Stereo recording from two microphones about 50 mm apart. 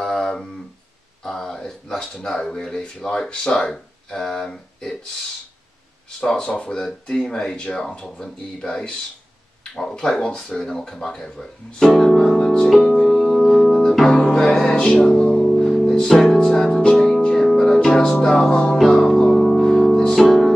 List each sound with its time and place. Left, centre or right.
0.0 s a sound: centre
1.2 s speech: centre
6.2 s speech: centre
11.8 s music: centre
12.6 s music: centre
13.0 s organ: centre
14.1 s music: centre
15.4 s music: centre